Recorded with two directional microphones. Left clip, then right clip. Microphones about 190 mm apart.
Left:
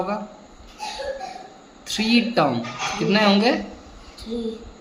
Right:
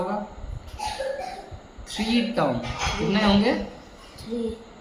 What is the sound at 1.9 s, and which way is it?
Speech, 50° left (ahead or behind).